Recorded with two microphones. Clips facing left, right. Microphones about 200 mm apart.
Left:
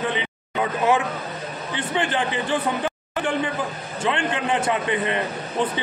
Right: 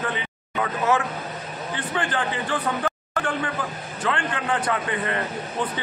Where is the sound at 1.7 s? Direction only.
25° left (ahead or behind).